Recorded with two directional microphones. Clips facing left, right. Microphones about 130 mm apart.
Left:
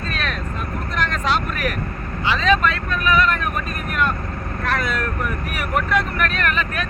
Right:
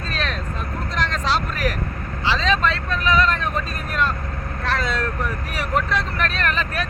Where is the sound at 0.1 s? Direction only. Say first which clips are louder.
Right 1 dB; 30° right (ahead or behind).